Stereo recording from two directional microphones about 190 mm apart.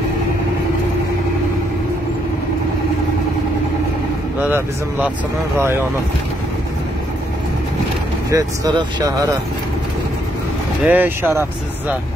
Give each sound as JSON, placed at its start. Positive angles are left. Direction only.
{"t": 4.4, "sound": "speech", "side_deg": -10}
{"t": 8.3, "sound": "speech", "side_deg": -20}
{"t": 10.9, "sound": "speech", "side_deg": -10}